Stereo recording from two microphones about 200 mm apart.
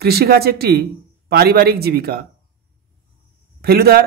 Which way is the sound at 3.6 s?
50° right (ahead or behind).